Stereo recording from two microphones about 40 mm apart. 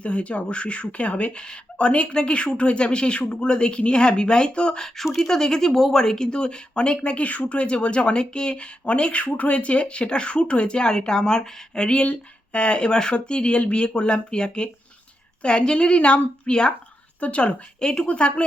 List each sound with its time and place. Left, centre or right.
0.0 s speech: left
17.2 s speech: left